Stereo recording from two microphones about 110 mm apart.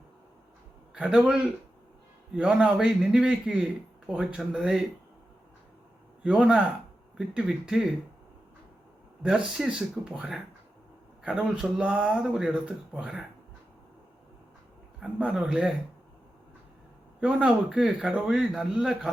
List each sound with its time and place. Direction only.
0.9 s a man's voice: 5° right (ahead or behind)
2.3 s a man's voice: 10° right (ahead or behind)
6.2 s a man's voice: 10° right (ahead or behind)
9.5 s a man's voice: 5° right (ahead or behind)
15.0 s speech: 5° right (ahead or behind)
17.2 s a man's voice: 10° right (ahead or behind)